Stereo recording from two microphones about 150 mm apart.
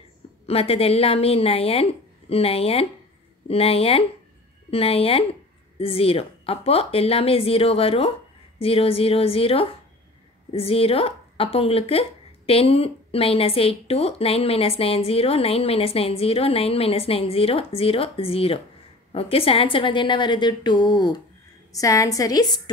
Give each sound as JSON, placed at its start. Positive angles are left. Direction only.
{"t": 0.5, "sound": "a woman's voice", "side_deg": 40}